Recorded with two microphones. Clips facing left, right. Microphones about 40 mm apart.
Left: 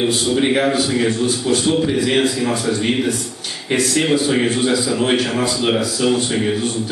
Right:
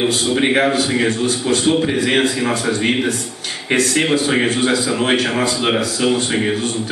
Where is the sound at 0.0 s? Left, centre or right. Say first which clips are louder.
Even; right.